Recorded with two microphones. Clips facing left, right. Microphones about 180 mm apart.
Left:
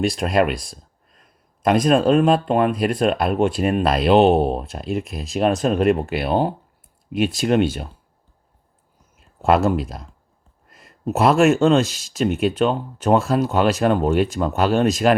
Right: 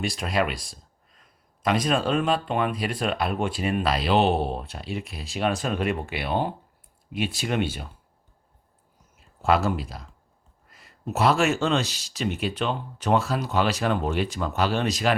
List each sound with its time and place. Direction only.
0.2 s speech: 50° left (ahead or behind)
1.6 s speech: 45° left (ahead or behind)
9.5 s speech: 45° left (ahead or behind)